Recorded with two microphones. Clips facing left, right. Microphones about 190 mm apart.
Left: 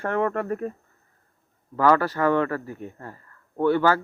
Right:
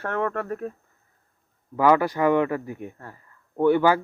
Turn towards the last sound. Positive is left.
turn(degrees=-15)  # may be behind; listen again after turning